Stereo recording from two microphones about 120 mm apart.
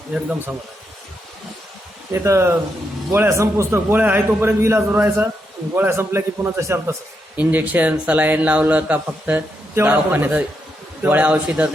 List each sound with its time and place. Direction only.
0.1 s a man's voice: 10° right (ahead or behind)
2.1 s a man's voice: 25° right (ahead or behind)